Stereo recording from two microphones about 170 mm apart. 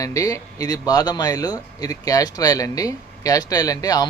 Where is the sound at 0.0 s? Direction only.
20° left (ahead or behind).